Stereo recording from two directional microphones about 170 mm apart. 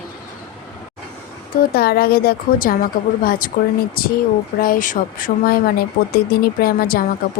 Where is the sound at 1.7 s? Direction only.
65° left (ahead or behind).